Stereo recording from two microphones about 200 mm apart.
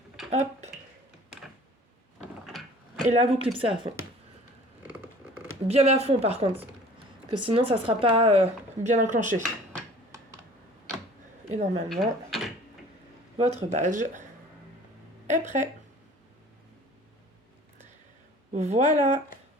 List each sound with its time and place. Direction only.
0.3 s a woman's voice: 35° right (ahead or behind)
2.5 s a sound: centre (ahead or behind)
3.1 s speech: 30° right (ahead or behind)
4.9 s a sound: 10° right (ahead or behind)
5.6 s a woman's voice: 30° right (ahead or behind)
11.4 s a woman's voice: 35° right (ahead or behind)
13.3 s a woman's voice: 30° right (ahead or behind)
15.3 s a woman's voice: 40° right (ahead or behind)
18.5 s a woman's voice: 35° right (ahead or behind)